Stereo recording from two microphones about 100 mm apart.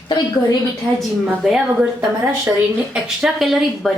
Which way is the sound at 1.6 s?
10° right (ahead or behind).